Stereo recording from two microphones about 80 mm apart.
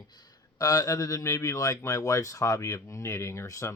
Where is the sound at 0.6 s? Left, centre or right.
Left.